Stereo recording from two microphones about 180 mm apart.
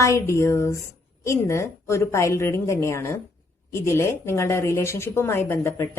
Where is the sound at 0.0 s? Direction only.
15° left (ahead or behind).